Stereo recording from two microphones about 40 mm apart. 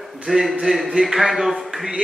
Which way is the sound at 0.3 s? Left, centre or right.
Centre.